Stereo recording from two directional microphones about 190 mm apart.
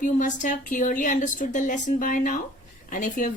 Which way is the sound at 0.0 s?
40° left (ahead or behind).